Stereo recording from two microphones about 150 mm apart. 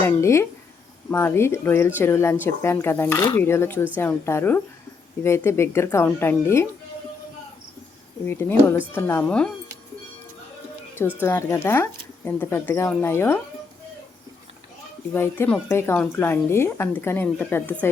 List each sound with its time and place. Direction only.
0.0 s speech: 20° left (ahead or behind)
8.3 s speech: 15° left (ahead or behind)
11.2 s speech: 15° left (ahead or behind)
15.1 s speech: 15° left (ahead or behind)